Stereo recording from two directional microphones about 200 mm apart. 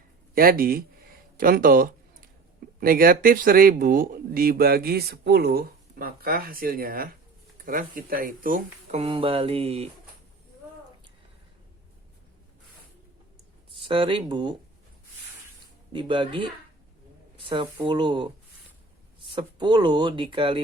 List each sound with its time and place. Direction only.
0.3 s speech: 45° right (ahead or behind)
9.0 s speech: 25° right (ahead or behind)
13.8 s speech: 25° right (ahead or behind)
15.9 s speech: 25° right (ahead or behind)
19.3 s speech: 20° right (ahead or behind)